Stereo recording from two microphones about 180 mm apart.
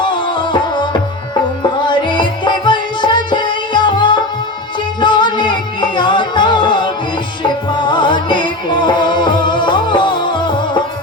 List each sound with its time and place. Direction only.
0.0 s music: 25° left (ahead or behind)